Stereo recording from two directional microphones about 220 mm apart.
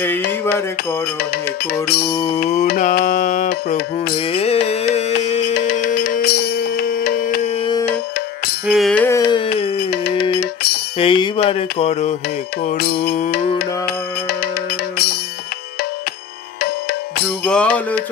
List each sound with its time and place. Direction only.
1.7 s music: 45° left (ahead or behind)
2.0 s music: 25° left (ahead or behind)
2.4 s mantra: 45° left (ahead or behind)
4.1 s music: 25° left (ahead or behind)
5.5 s music: 45° left (ahead or behind)
8.6 s music: centre (ahead or behind); by 9.4 s 15° left (ahead or behind)
9.8 s music: 45° left (ahead or behind)
11.0 s mantra: 25° left (ahead or behind)
12.6 s music: 45° left (ahead or behind)
17.5 s cutlery: 5° left (ahead or behind)